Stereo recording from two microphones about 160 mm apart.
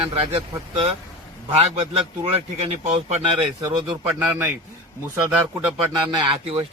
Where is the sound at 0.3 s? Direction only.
40° right (ahead or behind).